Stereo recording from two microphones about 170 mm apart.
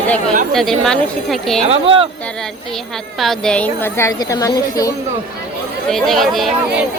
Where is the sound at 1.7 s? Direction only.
35° right (ahead or behind).